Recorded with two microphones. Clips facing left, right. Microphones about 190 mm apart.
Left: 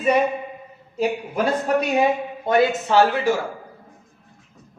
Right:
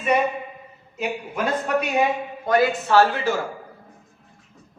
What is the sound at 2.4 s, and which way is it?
Speech, 20° left (ahead or behind).